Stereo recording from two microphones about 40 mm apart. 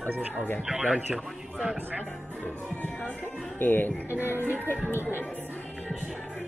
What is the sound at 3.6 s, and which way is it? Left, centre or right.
Speech, left.